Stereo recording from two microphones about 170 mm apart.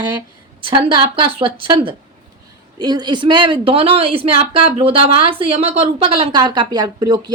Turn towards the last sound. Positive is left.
turn(degrees=-25)  # may be behind; listen again after turning